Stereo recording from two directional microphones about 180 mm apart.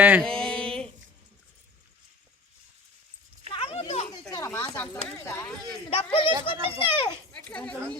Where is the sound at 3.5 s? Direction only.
35° left (ahead or behind).